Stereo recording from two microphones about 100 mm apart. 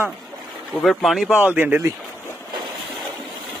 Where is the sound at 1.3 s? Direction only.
15° right (ahead or behind).